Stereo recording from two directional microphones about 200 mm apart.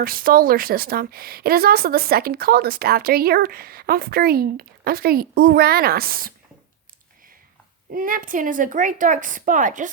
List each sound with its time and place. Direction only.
0.0 s speech: 45° right (ahead or behind)
7.9 s a woman's voice: 45° right (ahead or behind)